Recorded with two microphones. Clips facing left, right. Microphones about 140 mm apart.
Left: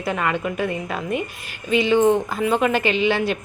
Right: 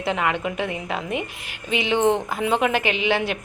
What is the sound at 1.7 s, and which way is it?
A woman's voice, 20° right (ahead or behind).